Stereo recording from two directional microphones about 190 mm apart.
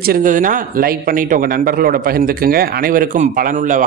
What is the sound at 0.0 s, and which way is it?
A man's voice, 50° right (ahead or behind).